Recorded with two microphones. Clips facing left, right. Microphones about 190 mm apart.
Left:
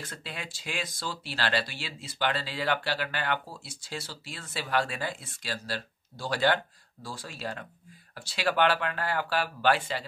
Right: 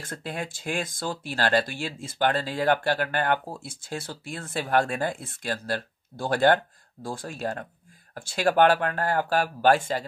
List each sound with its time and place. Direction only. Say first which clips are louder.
0.0 s speech: right 7 dB; 50° right (ahead or behind)